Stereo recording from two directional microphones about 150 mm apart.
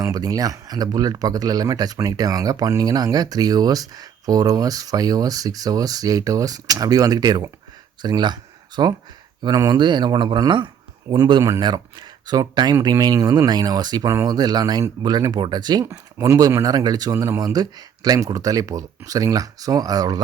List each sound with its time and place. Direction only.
0.0 s speech: 25° right (ahead or behind)